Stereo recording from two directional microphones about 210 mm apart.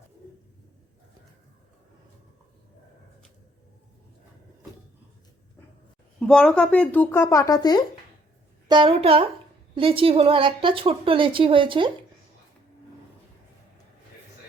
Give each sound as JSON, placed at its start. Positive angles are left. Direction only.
{"t": 6.1, "sound": "speech", "side_deg": 5}
{"t": 8.6, "sound": "a woman's voice", "side_deg": -20}